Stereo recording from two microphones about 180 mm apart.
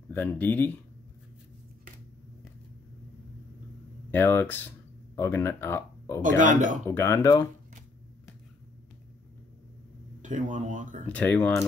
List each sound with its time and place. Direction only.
0.1 s speech: 10° left (ahead or behind)
4.1 s speech: 10° left (ahead or behind)
6.2 s speech: 45° right (ahead or behind)
6.9 s speech: 15° left (ahead or behind)
10.2 s speech: 45° right (ahead or behind)
11.1 s speech: 10° left (ahead or behind)